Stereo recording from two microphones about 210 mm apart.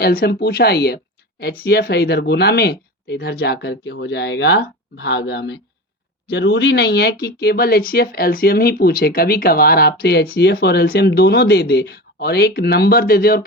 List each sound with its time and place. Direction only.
0.0 s speech: 45° left (ahead or behind)